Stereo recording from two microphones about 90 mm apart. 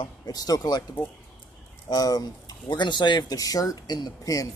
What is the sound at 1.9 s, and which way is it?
Speech, 45° left (ahead or behind).